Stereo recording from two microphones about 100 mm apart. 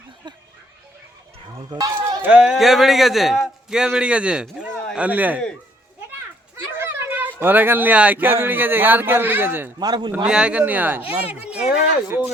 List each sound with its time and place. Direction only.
2.0 s a sound: 20° right (ahead or behind)
2.4 s a man's voice: 5° right (ahead or behind)
6.7 s speech: 25° right (ahead or behind)
9.8 s a man's voice: 45° right (ahead or behind)
10.2 s speech: 10° right (ahead or behind)